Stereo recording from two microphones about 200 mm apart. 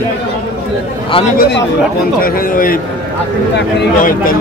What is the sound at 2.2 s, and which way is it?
Speech, 45° left (ahead or behind).